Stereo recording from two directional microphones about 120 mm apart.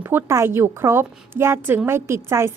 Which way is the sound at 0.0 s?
20° right (ahead or behind).